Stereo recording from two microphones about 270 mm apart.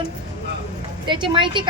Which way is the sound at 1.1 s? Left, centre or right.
Centre.